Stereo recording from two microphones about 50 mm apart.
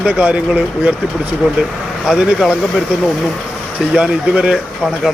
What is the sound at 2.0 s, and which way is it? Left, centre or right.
Speech, centre.